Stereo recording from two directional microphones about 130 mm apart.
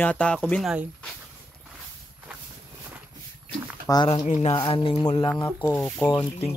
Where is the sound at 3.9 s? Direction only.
35° left (ahead or behind).